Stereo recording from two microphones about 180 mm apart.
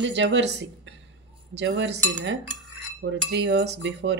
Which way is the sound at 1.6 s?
85° right.